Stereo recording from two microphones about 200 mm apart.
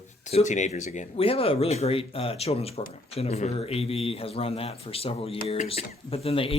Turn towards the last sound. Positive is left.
turn(degrees=30)  # may be behind; listen again after turning